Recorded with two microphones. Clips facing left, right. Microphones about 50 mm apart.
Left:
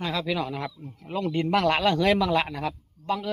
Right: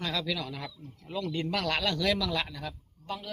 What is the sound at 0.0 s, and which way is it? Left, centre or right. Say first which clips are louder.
A man's voice: left 5 dB; left.